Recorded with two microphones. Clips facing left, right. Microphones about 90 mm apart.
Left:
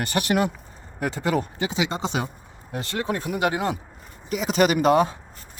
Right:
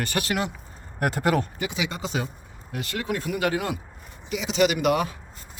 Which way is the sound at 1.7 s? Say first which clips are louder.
Left 4 dB; 25° left (ahead or behind).